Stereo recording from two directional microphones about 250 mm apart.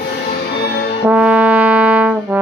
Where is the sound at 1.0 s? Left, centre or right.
Centre.